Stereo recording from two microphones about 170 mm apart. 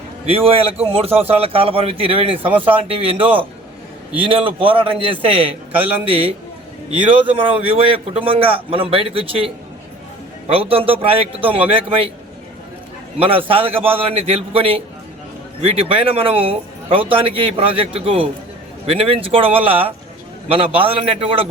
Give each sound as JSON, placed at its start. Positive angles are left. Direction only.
{"t": 0.3, "sound": "speech", "side_deg": -35}
{"t": 10.5, "sound": "speech", "side_deg": -35}
{"t": 13.1, "sound": "speech", "side_deg": -35}